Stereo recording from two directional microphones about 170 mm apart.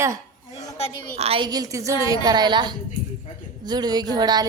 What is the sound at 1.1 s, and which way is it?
Speech, 35° right (ahead or behind).